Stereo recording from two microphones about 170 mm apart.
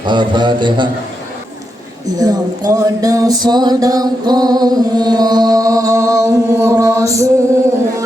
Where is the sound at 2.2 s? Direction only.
20° right (ahead or behind).